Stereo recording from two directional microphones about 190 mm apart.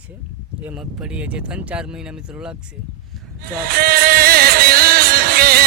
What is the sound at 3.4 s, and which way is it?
Music, 50° right (ahead or behind).